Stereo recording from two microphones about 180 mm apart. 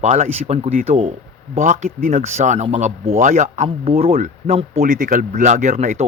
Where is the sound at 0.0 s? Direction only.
40° right (ahead or behind).